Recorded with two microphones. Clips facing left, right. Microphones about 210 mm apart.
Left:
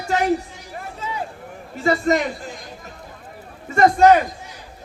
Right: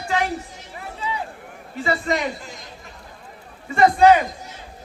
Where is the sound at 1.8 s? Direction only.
45° left (ahead or behind).